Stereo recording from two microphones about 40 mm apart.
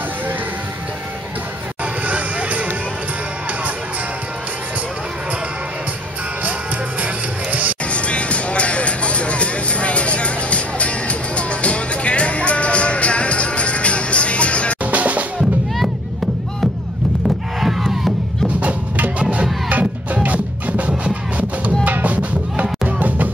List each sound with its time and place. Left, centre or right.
2.0 s music: right
7.9 s music: left
14.8 s drum: right
17.6 s crowd: centre
18.6 s music: right